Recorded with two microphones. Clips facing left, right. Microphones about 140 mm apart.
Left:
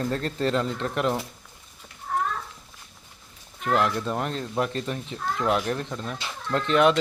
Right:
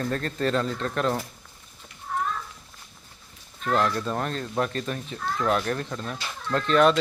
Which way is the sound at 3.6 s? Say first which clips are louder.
Left 1 dB; 15° left (ahead or behind).